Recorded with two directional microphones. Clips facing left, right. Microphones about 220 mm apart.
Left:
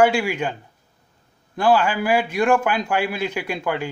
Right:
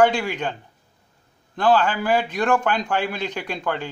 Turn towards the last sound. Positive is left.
turn(degrees=10)  # may be behind; listen again after turning